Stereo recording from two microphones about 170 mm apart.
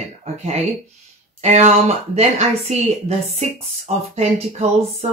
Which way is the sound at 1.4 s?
40° right (ahead or behind).